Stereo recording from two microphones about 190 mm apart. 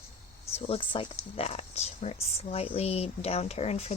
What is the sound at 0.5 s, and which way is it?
Speech, 30° left (ahead or behind).